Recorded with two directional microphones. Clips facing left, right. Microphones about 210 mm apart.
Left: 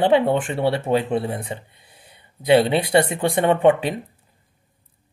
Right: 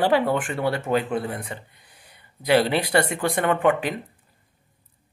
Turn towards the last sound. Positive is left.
turn(degrees=25)  # may be behind; listen again after turning